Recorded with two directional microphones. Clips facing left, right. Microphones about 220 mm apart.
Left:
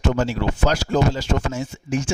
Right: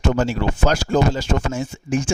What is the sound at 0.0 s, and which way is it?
A man's voice, 50° right (ahead or behind).